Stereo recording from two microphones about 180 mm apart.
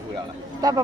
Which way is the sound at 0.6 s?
20° right (ahead or behind).